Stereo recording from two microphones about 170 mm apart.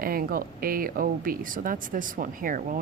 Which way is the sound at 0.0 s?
60° right (ahead or behind).